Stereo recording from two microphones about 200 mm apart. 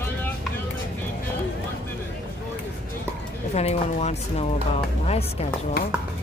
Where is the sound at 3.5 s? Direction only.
30° left (ahead or behind).